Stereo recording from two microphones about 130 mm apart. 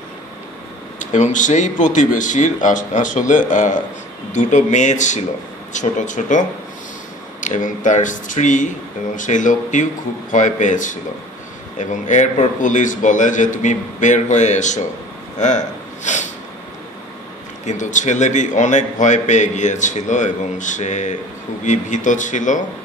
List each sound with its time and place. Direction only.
0.9 s a man's voice: 70° left (ahead or behind)
15.3 s a sound: 65° left (ahead or behind)
17.6 s a man's voice: 70° left (ahead or behind)